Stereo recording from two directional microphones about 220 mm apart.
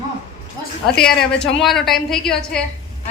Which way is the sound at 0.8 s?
5° left (ahead or behind).